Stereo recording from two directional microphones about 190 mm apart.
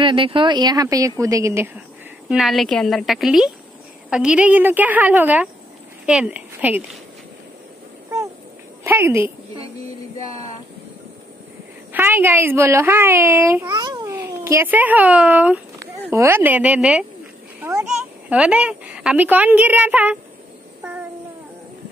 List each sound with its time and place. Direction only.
0.0 s speech: 25° right (ahead or behind)
2.2 s a woman's voice: centre (ahead or behind)
8.8 s a woman's voice: 15° right (ahead or behind)
10.1 s a sound: 15° left (ahead or behind)
11.9 s a woman's voice: 10° right (ahead or behind)
17.6 s a sound: 15° right (ahead or behind)
18.3 s a woman's voice: 5° right (ahead or behind)